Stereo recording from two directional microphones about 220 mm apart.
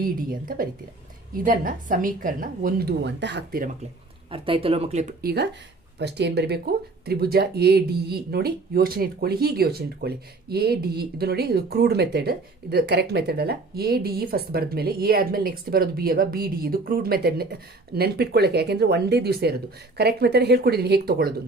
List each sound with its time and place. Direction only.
0.0 s a woman's voice: 40° right (ahead or behind)
4.3 s speech: 25° right (ahead or behind)
5.2 s speech: 45° right (ahead or behind)